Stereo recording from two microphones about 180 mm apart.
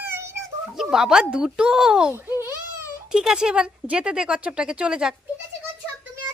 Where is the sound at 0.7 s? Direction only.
5° right (ahead or behind).